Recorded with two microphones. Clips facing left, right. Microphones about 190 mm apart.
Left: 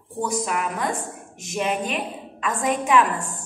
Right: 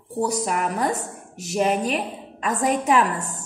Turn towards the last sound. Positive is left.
turn(degrees=-40)  # may be behind; listen again after turning